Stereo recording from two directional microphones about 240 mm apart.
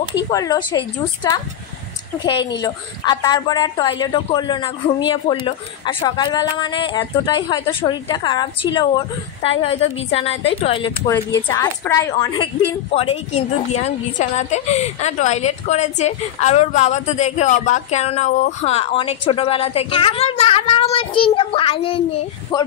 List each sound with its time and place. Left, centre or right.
0.3 s a woman's voice: centre
11.4 s a woman's voice: centre
12.9 s a woman's voice: left